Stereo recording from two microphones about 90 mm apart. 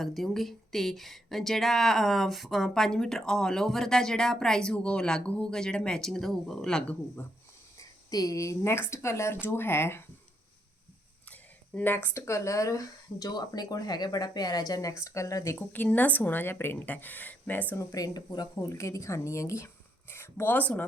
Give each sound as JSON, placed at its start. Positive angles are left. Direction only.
{"t": 0.0, "sound": "speech", "side_deg": 0}
{"t": 7.2, "sound": "speech", "side_deg": 20}
{"t": 7.8, "sound": "speech", "side_deg": 40}
{"t": 11.3, "sound": "a sound", "side_deg": 15}
{"t": 12.0, "sound": "speech", "side_deg": 30}
{"t": 15.5, "sound": "speech", "side_deg": 20}
{"t": 17.7, "sound": "speech", "side_deg": 40}
{"t": 18.6, "sound": "speech", "side_deg": 35}